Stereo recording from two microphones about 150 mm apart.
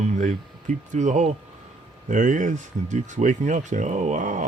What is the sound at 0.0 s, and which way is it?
Speech, 55° right (ahead or behind).